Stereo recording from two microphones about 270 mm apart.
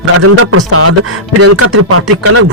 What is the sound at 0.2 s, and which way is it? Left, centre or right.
Speech, right.